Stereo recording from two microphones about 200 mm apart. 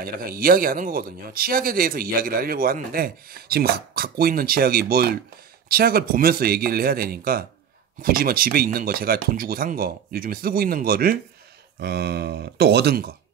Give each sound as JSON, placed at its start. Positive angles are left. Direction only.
{"t": 0.0, "sound": "speech", "side_deg": -45}